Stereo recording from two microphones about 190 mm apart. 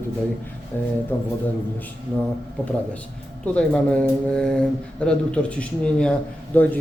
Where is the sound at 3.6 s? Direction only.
5° left (ahead or behind).